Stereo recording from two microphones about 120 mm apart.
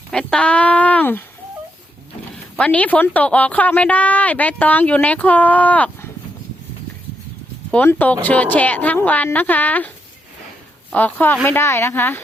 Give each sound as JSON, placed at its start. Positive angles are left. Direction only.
{"t": 0.1, "sound": "a woman's voice", "side_deg": 5}
{"t": 2.6, "sound": "a woman's voice", "side_deg": 10}
{"t": 7.7, "sound": "a woman's voice", "side_deg": 15}
{"t": 10.9, "sound": "a woman's voice", "side_deg": 15}